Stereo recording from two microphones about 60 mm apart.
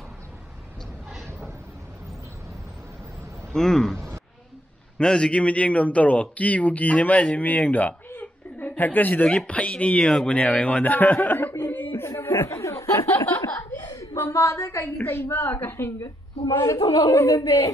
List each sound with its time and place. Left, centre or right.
3.5 s speech: centre; by 7.9 s left
8.1 s chuckle: left
9.5 s speech: left
12.2 s a sound: left
12.4 s snicker: left
14.1 s a woman's voice: left
15.0 s a woman's voice: left
16.6 s a woman's voice: left
17.1 s a woman's voice: left